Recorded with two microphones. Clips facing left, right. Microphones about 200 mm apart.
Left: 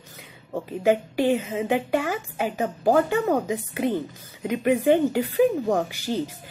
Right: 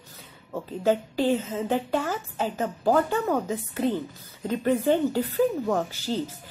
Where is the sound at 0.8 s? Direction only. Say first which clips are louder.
Left 2 dB; 15° left (ahead or behind).